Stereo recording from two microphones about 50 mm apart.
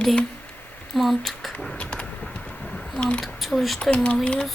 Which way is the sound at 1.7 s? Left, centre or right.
Left.